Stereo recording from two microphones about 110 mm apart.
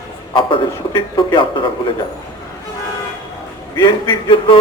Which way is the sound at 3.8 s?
45° left (ahead or behind).